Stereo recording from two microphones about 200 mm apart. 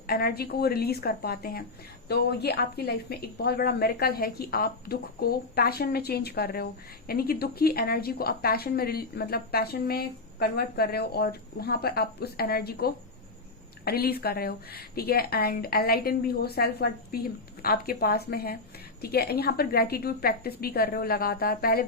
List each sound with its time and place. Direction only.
0.1 s speech: 50° left (ahead or behind)